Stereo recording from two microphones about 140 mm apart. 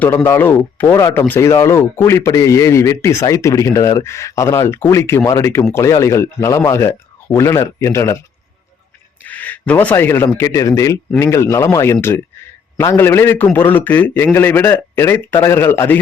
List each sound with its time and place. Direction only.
0.0 s a man's voice: 15° left (ahead or behind)
9.2 s a man's voice: 10° left (ahead or behind)